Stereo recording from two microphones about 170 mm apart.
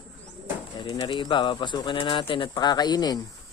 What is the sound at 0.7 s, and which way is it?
Speech, 25° left (ahead or behind).